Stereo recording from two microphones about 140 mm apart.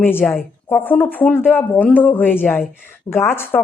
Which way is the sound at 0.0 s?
15° left (ahead or behind).